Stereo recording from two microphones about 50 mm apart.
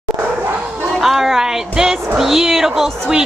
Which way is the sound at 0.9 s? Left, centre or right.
Centre.